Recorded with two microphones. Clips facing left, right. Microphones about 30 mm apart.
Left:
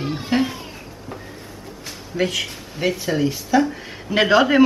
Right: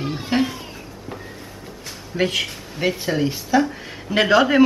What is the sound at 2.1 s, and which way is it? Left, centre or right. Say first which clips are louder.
Speech: right 1 dB; centre.